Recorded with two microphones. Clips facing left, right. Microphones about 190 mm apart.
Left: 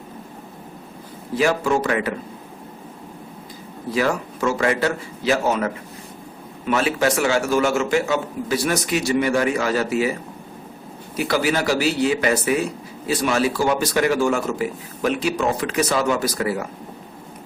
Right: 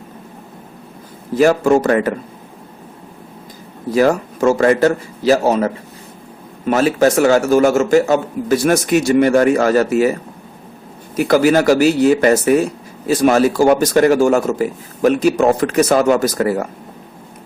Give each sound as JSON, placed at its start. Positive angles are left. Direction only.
{"t": 1.4, "sound": "a man's voice", "side_deg": -45}
{"t": 3.9, "sound": "a man's voice", "side_deg": -45}
{"t": 11.2, "sound": "a man's voice", "side_deg": -50}